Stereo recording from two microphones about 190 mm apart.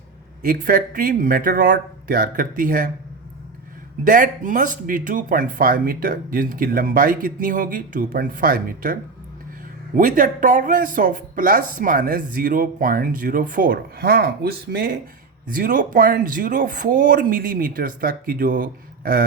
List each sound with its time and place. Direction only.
0.4 s speech: 50° right (ahead or behind)
4.0 s speech: 45° right (ahead or behind)